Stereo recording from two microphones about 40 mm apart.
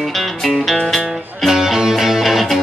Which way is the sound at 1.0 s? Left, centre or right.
Centre.